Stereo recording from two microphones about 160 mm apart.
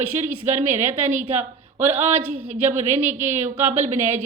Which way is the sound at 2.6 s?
45° right (ahead or behind).